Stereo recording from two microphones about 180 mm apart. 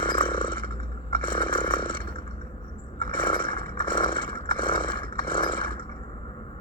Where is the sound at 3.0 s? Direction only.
25° left (ahead or behind).